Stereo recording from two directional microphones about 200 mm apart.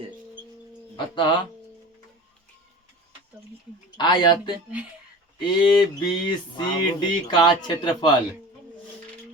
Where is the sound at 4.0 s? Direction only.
20° left (ahead or behind).